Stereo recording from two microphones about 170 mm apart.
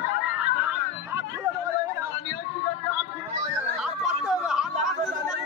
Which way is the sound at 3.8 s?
5° right (ahead or behind).